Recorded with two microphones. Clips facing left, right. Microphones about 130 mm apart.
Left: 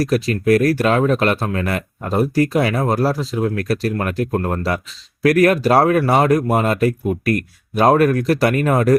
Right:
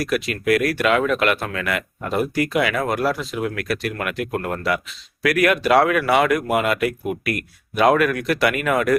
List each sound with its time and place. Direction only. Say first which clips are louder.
0.0 s speech: left 5 dB; 35° left (ahead or behind)